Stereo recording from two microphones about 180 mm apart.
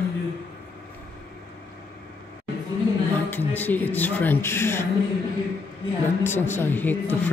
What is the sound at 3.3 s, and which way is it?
Speech, 10° left (ahead or behind).